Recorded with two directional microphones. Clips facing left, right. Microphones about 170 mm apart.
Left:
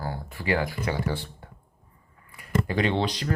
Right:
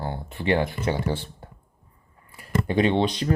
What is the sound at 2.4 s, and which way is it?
Speech, 20° right (ahead or behind).